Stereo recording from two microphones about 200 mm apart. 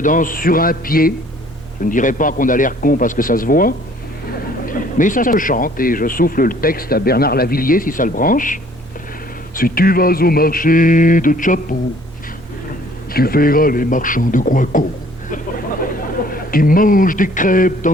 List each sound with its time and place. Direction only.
0.0 s speech: 40° left (ahead or behind)
9.6 s speech: 45° left (ahead or behind)
13.1 s speech: 50° left (ahead or behind)
16.3 s speech: 45° left (ahead or behind)